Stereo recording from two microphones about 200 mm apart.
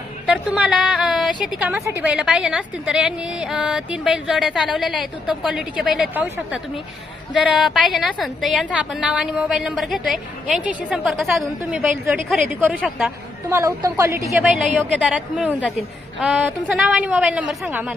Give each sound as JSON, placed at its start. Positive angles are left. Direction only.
{"t": 0.3, "sound": "a woman's voice", "side_deg": -5}
{"t": 7.4, "sound": "a woman's voice", "side_deg": 0}
{"t": 14.3, "sound": "a woman's voice", "side_deg": -5}